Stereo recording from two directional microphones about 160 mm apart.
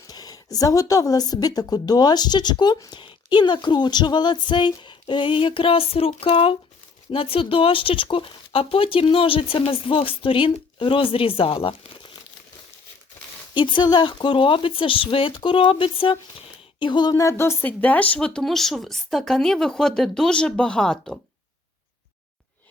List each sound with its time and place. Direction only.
0.1 s a woman's voice: 25° left (ahead or behind)
13.5 s speech: 30° left (ahead or behind); by 21.2 s 5° left (ahead or behind)